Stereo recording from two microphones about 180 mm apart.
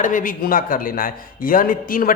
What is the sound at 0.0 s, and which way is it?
A man's voice, 50° left (ahead or behind).